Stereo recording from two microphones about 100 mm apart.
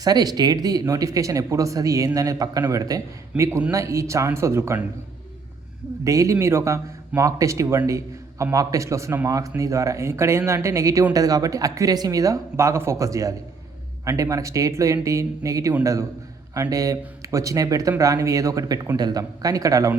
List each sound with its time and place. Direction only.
0.0 s speech: 40° right (ahead or behind)
6.1 s speech: 30° right (ahead or behind)